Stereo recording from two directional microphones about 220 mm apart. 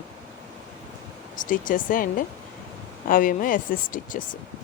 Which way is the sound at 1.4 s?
35° left (ahead or behind).